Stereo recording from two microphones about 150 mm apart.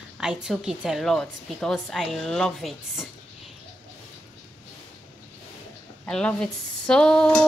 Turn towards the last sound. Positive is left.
turn(degrees=5)  # may be behind; listen again after turning